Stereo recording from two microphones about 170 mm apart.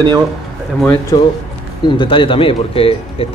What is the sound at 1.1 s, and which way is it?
A man's voice, 20° left (ahead or behind).